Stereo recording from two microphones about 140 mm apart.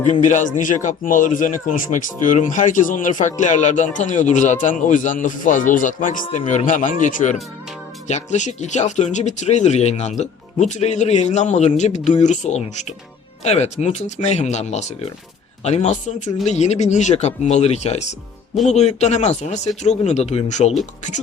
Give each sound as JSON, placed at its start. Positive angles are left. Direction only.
{"t": 0.1, "sound": "a man's voice", "side_deg": 60}